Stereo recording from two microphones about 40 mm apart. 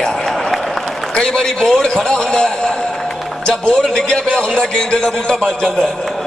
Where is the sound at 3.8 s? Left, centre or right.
Centre.